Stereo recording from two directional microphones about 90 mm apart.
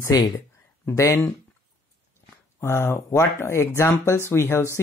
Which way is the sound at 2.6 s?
25° left (ahead or behind).